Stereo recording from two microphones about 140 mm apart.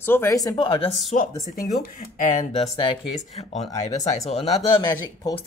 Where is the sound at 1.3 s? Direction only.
25° left (ahead or behind).